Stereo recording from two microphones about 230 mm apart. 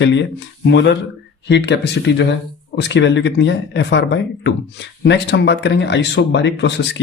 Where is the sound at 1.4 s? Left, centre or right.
Left.